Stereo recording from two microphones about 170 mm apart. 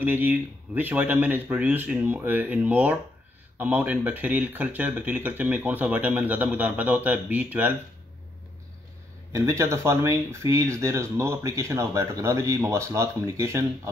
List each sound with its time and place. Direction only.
0.0 s speech: 10° right (ahead or behind)
9.3 s speech: 15° right (ahead or behind)